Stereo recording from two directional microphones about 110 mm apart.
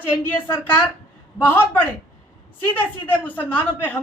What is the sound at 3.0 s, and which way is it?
Speech, 15° left (ahead or behind).